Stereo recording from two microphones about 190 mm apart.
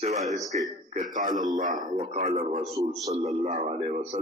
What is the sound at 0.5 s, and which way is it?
A man's voice, 40° right (ahead or behind).